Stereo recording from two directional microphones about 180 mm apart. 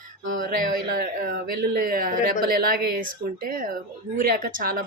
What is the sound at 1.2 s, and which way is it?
Speech, 55° right (ahead or behind).